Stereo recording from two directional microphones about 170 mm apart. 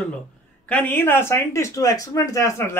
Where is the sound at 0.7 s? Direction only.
10° left (ahead or behind).